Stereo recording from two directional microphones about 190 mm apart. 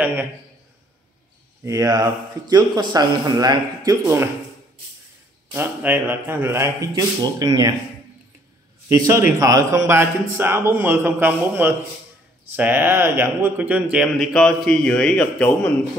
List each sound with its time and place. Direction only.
0.0 s speech: 10° right (ahead or behind)
1.6 s speech: 15° right (ahead or behind)
5.5 s speech: 10° right (ahead or behind)
8.8 s a man's voice: 15° right (ahead or behind); by 15.7 s 5° left (ahead or behind)